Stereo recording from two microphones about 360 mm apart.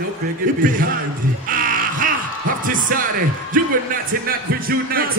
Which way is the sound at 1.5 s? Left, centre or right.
Right.